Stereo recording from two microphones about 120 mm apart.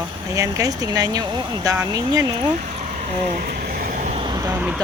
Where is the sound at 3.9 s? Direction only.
90° right.